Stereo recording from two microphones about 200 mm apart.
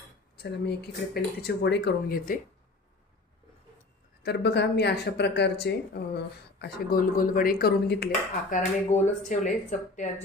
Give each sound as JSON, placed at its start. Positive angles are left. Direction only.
{"t": 0.4, "sound": "speech", "side_deg": 55}
{"t": 4.2, "sound": "speech", "side_deg": 55}
{"t": 8.9, "sound": "speech", "side_deg": 40}